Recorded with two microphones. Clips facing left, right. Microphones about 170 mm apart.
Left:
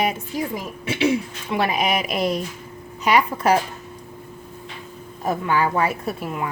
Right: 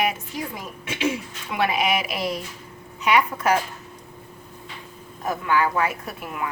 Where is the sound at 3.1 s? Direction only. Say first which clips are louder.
Left 2 dB; 35° left (ahead or behind).